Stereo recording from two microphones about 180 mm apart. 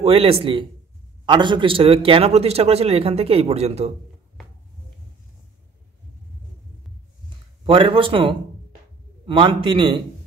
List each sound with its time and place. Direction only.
0.0 s a man's voice: 30° right (ahead or behind)
7.6 s a man's voice: 30° right (ahead or behind)